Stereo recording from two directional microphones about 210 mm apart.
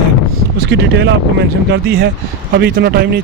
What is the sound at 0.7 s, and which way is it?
Speech, 60° right (ahead or behind).